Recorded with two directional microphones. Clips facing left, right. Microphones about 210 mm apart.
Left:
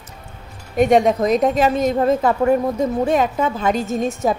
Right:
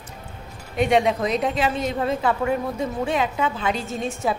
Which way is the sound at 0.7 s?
45° left (ahead or behind).